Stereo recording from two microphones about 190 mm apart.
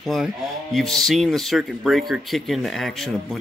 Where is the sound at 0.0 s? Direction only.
Centre (ahead or behind).